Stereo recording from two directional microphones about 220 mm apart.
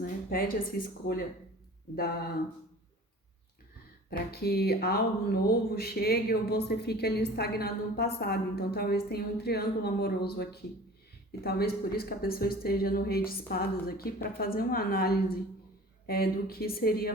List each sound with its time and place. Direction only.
0.0 s speech: 40° left (ahead or behind)
4.1 s speech: 45° left (ahead or behind)